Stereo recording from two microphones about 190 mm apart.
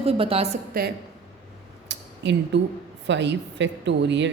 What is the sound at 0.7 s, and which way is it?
Speech, 55° right (ahead or behind).